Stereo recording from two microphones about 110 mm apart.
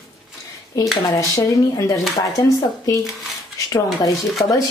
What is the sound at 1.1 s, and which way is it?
Speech, 30° left (ahead or behind).